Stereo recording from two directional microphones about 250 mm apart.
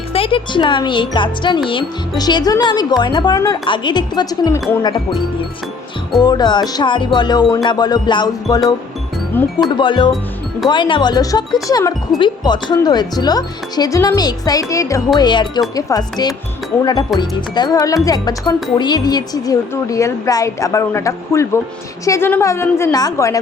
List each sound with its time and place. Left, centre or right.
0.1 s speech: left
6.1 s speech: centre
9.6 s speech: centre